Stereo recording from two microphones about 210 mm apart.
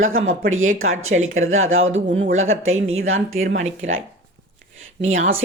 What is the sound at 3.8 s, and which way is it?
Speech, 65° right (ahead or behind).